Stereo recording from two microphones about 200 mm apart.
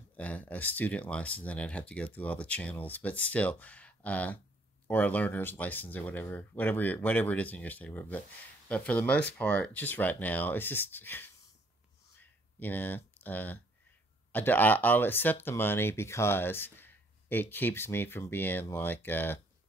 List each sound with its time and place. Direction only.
0.1 s speech: 5° left (ahead or behind)
12.2 s a sound: 10° left (ahead or behind)
14.3 s speech: 10° left (ahead or behind)